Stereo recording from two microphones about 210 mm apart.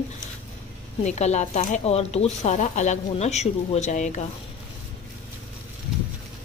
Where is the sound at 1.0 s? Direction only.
30° left (ahead or behind).